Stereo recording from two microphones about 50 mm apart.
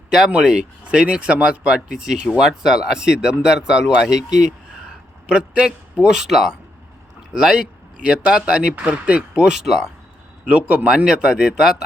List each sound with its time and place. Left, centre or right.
0.3 s speech: centre
9.5 s speech: centre
10.4 s speech: right